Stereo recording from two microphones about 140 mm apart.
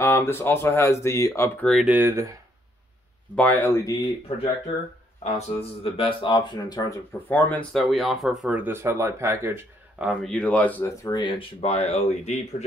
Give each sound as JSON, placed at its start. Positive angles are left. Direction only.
{"t": 0.0, "sound": "speech", "side_deg": 20}
{"t": 1.9, "sound": "speech", "side_deg": -15}
{"t": 3.3, "sound": "speech", "side_deg": 15}
{"t": 5.2, "sound": "speech", "side_deg": 45}
{"t": 7.2, "sound": "speech", "side_deg": 15}
{"t": 7.7, "sound": "speech", "side_deg": 0}
{"t": 9.9, "sound": "speech", "side_deg": 0}
{"t": 11.1, "sound": "speech", "side_deg": 35}